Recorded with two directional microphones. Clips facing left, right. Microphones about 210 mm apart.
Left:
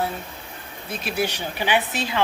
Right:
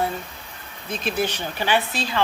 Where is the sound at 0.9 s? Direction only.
10° left (ahead or behind).